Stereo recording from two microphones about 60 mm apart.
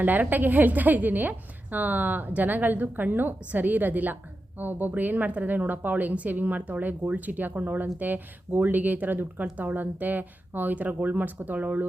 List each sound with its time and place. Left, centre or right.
0.0 s a woman's voice: right